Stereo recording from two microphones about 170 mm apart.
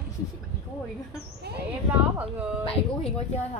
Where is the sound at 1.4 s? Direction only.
75° right (ahead or behind).